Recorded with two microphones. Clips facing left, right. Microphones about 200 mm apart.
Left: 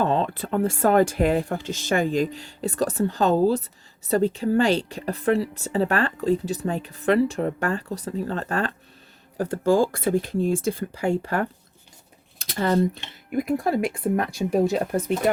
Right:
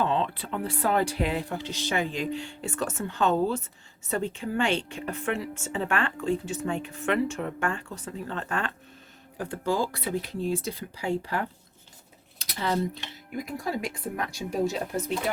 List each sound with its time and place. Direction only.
0.0 s a woman's voice: 45° left (ahead or behind)
12.5 s speech: 50° left (ahead or behind)